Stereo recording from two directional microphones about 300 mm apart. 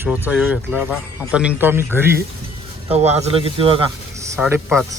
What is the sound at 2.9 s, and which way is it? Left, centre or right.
Speech, right.